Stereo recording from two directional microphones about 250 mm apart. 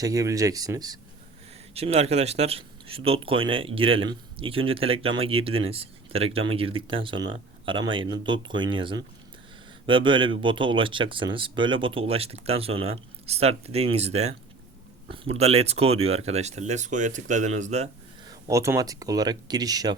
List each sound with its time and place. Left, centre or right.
0.0 s speech: centre
18.3 s speech: centre